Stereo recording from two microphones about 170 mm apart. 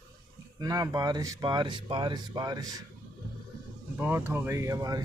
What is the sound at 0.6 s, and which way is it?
Speech, 20° right (ahead or behind).